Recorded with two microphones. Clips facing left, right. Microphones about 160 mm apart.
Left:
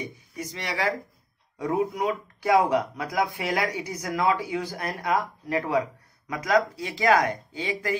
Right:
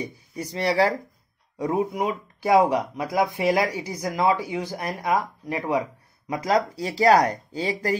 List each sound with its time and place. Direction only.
0.0 s speech: 35° right (ahead or behind)
1.6 s speech: 25° right (ahead or behind)